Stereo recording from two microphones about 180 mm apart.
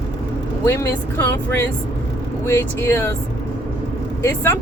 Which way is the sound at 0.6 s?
15° left (ahead or behind).